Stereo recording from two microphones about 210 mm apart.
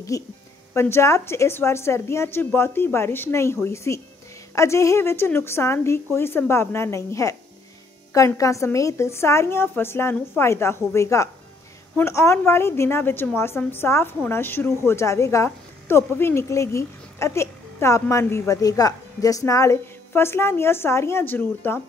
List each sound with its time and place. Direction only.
0.1 s a woman's voice: 15° left (ahead or behind)